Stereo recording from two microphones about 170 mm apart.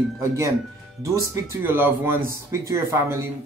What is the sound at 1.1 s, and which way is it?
Speech, 15° right (ahead or behind).